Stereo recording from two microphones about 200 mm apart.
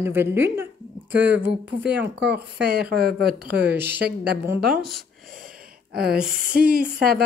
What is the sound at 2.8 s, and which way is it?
Speech, 50° right (ahead or behind).